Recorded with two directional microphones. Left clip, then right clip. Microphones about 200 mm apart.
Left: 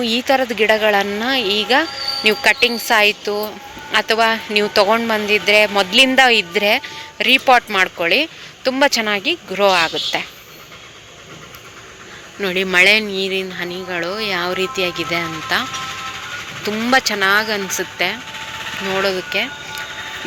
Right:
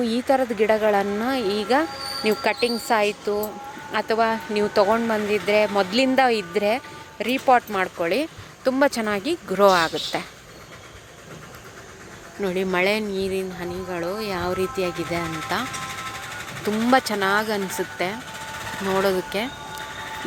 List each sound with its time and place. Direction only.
0.0 s a woman's voice: 10° right (ahead or behind)
3.2 s speech: 10° left (ahead or behind)
3.9 s a woman's voice: 5° right (ahead or behind)
12.4 s a woman's voice: 5° right (ahead or behind)
16.6 s a woman's voice: 15° right (ahead or behind)